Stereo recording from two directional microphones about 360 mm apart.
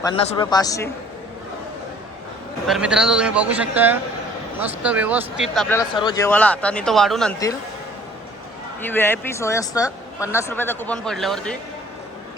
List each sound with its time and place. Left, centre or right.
0.0 s a man's voice: centre
2.6 s speech: centre
8.8 s speech: centre